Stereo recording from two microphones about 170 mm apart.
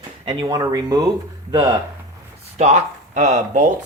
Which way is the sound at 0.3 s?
25° right (ahead or behind).